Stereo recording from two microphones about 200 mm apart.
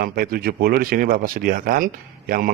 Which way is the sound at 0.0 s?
45° right (ahead or behind).